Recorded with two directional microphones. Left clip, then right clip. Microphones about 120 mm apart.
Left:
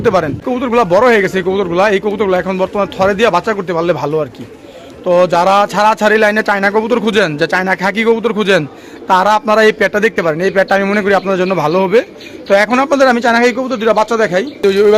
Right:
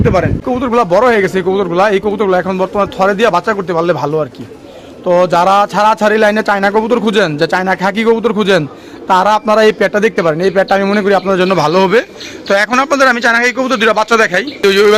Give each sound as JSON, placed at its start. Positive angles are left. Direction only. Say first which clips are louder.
{"t": 0.0, "sound": "speech", "louder": "even", "side_deg": 40}
{"t": 0.4, "sound": "a man's voice", "louder": "even", "side_deg": 20}